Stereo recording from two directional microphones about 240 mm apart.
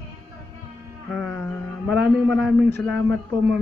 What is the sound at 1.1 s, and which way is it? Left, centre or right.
Speech, centre.